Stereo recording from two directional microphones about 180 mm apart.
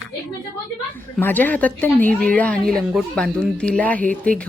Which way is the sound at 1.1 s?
10° left (ahead or behind).